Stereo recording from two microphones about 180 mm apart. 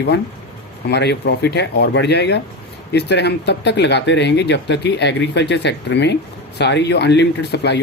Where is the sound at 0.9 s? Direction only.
70° left (ahead or behind).